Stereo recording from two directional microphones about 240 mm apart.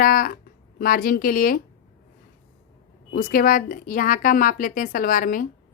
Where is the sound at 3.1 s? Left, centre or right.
Left.